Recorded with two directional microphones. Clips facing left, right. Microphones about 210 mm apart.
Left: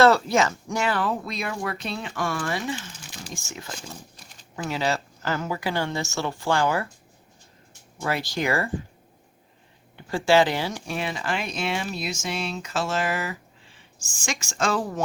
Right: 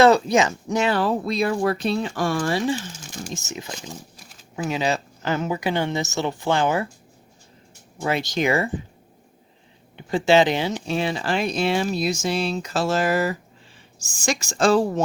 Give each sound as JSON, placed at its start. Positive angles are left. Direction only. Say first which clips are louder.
{"t": 0.0, "sound": "speech", "louder": "right 3 dB", "side_deg": -20}
{"t": 3.3, "sound": "speech", "louder": "right 5 dB", "side_deg": -20}
{"t": 4.7, "sound": "speech", "louder": "right 2 dB", "side_deg": -15}
{"t": 8.0, "sound": "speech", "louder": "right 4 dB", "side_deg": -20}
{"t": 10.1, "sound": "speech", "louder": "right 3 dB", "side_deg": -20}